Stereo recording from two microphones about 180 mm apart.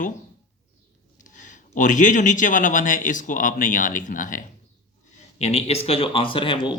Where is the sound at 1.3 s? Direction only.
45° left (ahead or behind).